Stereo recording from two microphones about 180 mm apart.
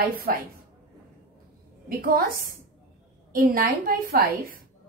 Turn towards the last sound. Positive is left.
turn(degrees=-55)  # may be behind; listen again after turning